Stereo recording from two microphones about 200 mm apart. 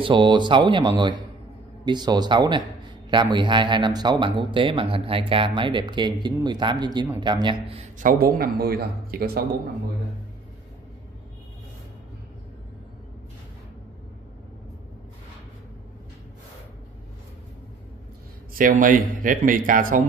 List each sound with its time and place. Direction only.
0.0 s a man's voice: 25° right (ahead or behind); by 9.5 s 50° right (ahead or behind)
18.5 s speech: 45° right (ahead or behind)